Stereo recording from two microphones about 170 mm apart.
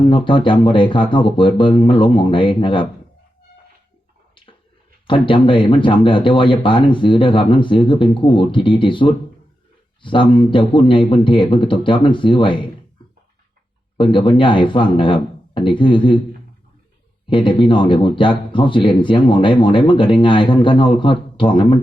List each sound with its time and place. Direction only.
0.1 s speech: 30° left (ahead or behind)
5.0 s speech: 30° left (ahead or behind)
13.9 s speech: 30° left (ahead or behind)
17.2 s a man's voice: 30° left (ahead or behind)